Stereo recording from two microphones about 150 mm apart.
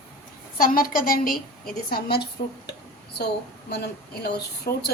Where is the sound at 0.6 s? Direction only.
70° left (ahead or behind).